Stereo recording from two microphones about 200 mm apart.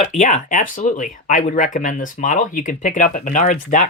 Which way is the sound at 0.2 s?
40° left (ahead or behind).